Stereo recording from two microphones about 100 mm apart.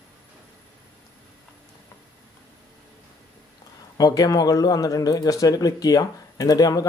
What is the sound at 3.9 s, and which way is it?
A man's voice, 40° left (ahead or behind).